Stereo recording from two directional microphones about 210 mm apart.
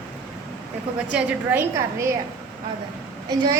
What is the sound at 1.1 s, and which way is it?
A woman's voice, 5° right (ahead or behind).